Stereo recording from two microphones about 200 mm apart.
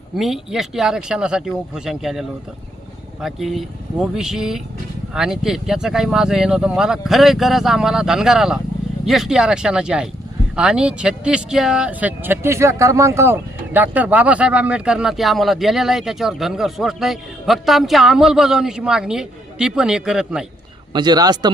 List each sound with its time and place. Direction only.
0.2 s speech: centre (ahead or behind)
20.9 s speech: 20° right (ahead or behind)